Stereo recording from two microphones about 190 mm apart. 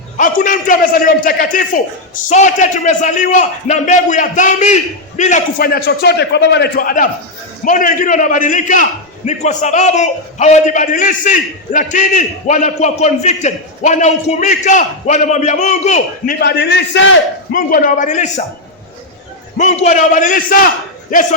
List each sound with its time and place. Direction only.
0.2 s a man's voice: 45° left (ahead or behind)
16.4 s a man's voice: 60° left (ahead or behind)
17.5 s a man's voice: 50° left (ahead or behind)
19.5 s a man's voice: 35° left (ahead or behind)